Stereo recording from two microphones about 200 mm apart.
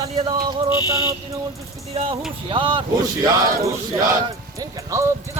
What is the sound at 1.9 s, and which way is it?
Speech, 30° right (ahead or behind).